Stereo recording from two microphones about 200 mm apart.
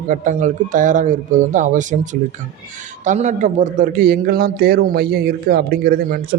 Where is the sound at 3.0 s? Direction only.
35° right (ahead or behind).